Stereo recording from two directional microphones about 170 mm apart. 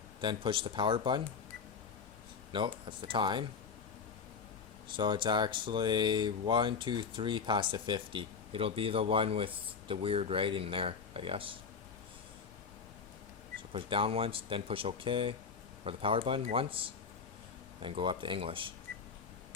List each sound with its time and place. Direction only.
0.2 s speech: 30° right (ahead or behind)
2.5 s speech: 30° right (ahead or behind)
4.9 s speech: 30° right (ahead or behind)
13.6 s speech: 30° right (ahead or behind)